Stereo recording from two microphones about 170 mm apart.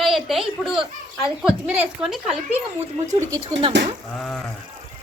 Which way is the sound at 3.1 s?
20° right (ahead or behind).